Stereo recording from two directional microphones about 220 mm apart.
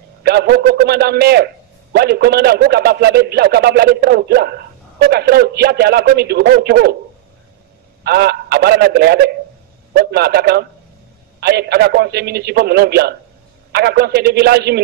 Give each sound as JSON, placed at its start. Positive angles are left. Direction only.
{"t": 0.2, "sound": "a man's voice", "side_deg": -45}
{"t": 8.0, "sound": "a man's voice", "side_deg": -45}